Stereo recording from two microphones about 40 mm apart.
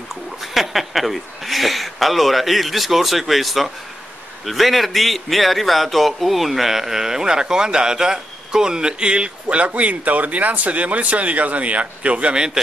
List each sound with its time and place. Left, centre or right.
0.1 s a man's voice: centre; by 12.4 s right